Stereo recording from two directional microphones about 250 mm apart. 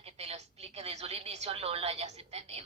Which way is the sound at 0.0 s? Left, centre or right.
Right.